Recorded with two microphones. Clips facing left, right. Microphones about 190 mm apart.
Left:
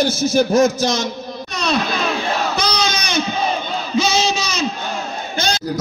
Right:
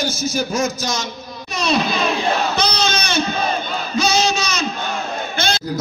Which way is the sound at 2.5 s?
10° left (ahead or behind).